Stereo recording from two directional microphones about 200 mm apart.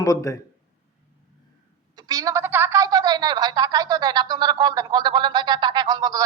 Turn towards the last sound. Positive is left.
turn(degrees=-20)  # may be behind; listen again after turning